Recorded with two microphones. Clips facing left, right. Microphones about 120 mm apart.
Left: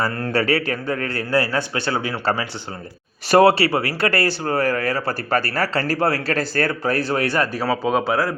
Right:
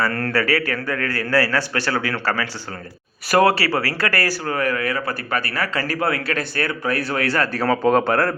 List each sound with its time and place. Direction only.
0.0 s a man's voice: 20° left (ahead or behind)
3.2 s speech: 25° left (ahead or behind)
7.6 s speech: 5° left (ahead or behind)